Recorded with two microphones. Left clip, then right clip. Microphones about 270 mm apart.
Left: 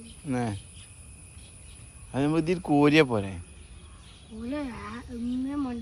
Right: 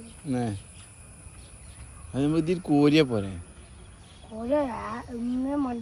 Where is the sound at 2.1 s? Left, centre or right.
Centre.